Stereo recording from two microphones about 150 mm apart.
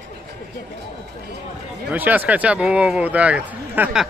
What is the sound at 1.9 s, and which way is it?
Speech, 10° right (ahead or behind).